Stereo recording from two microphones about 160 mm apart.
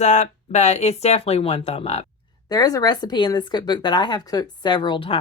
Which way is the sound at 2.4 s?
25° left (ahead or behind).